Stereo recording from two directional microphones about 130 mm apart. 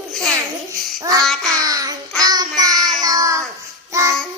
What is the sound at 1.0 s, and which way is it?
Babbling, 25° right (ahead or behind).